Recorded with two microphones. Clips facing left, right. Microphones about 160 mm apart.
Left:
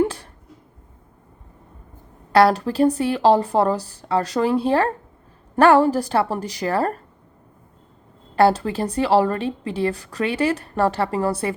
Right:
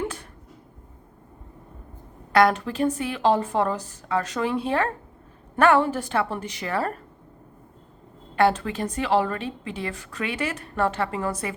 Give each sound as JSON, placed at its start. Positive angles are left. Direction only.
{"t": 2.3, "sound": "a woman's voice", "side_deg": 35}
{"t": 8.4, "sound": "a woman's voice", "side_deg": 35}